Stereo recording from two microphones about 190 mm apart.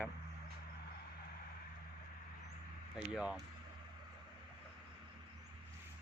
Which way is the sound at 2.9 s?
5° right (ahead or behind).